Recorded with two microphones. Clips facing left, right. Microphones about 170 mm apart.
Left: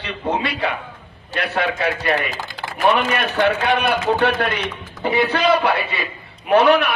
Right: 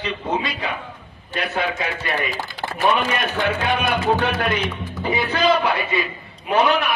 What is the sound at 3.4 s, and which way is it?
Speech, 70° left (ahead or behind).